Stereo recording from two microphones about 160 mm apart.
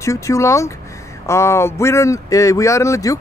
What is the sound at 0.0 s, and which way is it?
Speech, 20° left (ahead or behind).